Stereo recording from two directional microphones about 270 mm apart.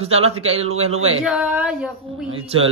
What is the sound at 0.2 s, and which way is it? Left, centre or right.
Mantra, right.